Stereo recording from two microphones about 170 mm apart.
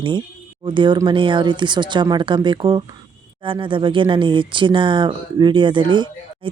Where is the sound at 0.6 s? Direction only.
30° right (ahead or behind).